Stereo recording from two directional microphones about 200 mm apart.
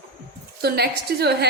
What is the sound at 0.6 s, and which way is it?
Speech, 50° right (ahead or behind).